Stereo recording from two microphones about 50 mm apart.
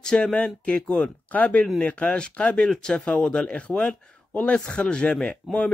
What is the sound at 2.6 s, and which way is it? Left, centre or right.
Speech, centre.